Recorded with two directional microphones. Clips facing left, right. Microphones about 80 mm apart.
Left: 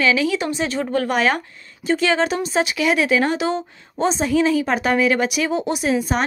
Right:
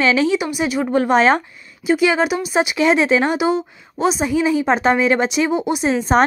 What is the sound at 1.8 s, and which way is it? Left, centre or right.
A woman's voice, centre.